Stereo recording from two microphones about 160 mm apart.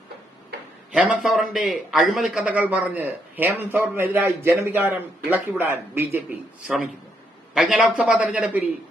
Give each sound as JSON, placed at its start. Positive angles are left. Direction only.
{"t": 0.9, "sound": "a man's voice", "side_deg": -5}
{"t": 6.7, "sound": "a man's voice", "side_deg": 0}